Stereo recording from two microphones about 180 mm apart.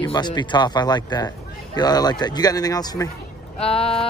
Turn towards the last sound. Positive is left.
turn(degrees=35)  # may be behind; listen again after turning